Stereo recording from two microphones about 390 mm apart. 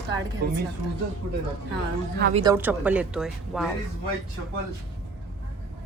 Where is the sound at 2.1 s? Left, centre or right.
Right.